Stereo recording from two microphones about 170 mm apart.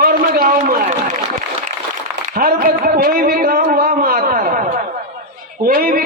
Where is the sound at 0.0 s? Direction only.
60° right (ahead or behind).